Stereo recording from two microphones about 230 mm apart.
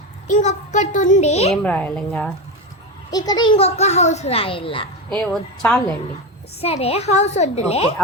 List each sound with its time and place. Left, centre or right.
0.3 s a child's voice: left
1.6 s a woman's voice: centre
3.1 s a child's voice: centre
5.0 s a woman's voice: centre
6.6 s a child's voice: left